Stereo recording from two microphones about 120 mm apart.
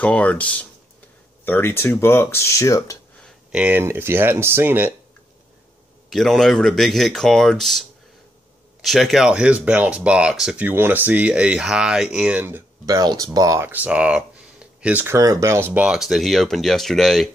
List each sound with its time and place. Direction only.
0.0 s speech: 10° left (ahead or behind)
3.5 s speech: 15° right (ahead or behind)
6.0 s speech: centre (ahead or behind)
8.8 s speech: centre (ahead or behind)
10.7 s speech: 15° right (ahead or behind)
12.8 s speech: 30° right (ahead or behind)
13.7 s speech: 10° right (ahead or behind)
15.1 s speech: 25° right (ahead or behind); by 17.3 s centre (ahead or behind)